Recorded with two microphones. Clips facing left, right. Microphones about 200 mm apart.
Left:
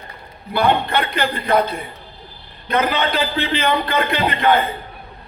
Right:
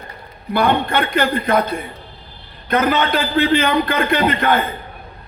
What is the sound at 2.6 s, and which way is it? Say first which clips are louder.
A man's voice: right 2 dB; 50° right (ahead or behind).